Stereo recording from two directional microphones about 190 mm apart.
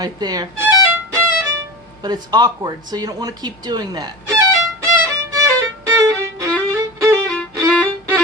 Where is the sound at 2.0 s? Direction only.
20° right (ahead or behind).